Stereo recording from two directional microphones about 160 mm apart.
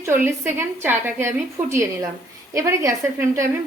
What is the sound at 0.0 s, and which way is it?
A woman's voice, 15° right (ahead or behind).